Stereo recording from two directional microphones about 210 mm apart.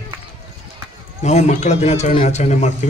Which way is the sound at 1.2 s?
35° left (ahead or behind).